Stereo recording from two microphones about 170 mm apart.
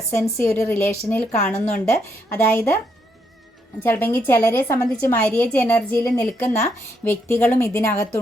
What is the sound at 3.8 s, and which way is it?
A woman's voice, 10° left (ahead or behind).